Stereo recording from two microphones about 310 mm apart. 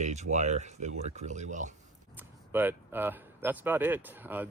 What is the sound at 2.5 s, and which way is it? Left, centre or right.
Speech, centre.